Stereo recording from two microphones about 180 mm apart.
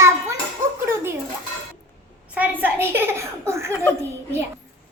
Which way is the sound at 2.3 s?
10° right (ahead or behind).